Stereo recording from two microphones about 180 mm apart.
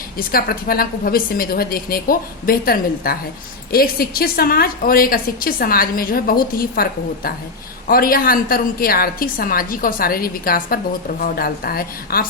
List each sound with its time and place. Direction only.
0.2 s a woman's voice: 55° left (ahead or behind)
7.9 s a woman's voice: 55° left (ahead or behind)